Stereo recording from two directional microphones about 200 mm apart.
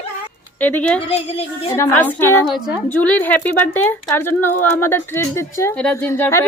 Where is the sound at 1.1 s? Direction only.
30° left (ahead or behind).